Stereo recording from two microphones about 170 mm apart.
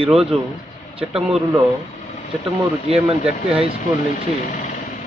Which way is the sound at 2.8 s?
35° right (ahead or behind).